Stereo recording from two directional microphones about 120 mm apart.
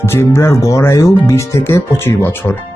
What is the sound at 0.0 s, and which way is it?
Speech, 20° left (ahead or behind).